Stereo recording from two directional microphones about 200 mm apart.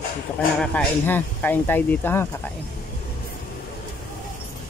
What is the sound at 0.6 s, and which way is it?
Speech, 5° left (ahead or behind).